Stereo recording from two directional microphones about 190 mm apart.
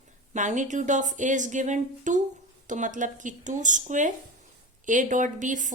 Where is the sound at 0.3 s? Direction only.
40° right (ahead or behind).